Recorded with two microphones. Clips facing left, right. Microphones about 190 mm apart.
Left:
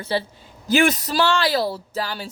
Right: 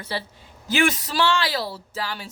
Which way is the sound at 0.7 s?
40° left (ahead or behind).